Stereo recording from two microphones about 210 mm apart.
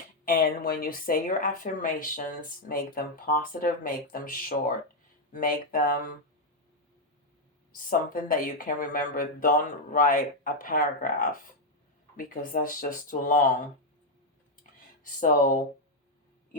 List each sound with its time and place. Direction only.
0.3 s speech: 45° left (ahead or behind)
7.9 s speech: 40° left (ahead or behind)
15.0 s speech: 40° left (ahead or behind)